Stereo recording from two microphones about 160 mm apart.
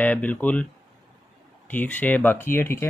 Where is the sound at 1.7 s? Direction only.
10° left (ahead or behind).